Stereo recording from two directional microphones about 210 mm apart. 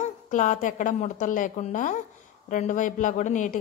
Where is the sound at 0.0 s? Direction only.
35° left (ahead or behind).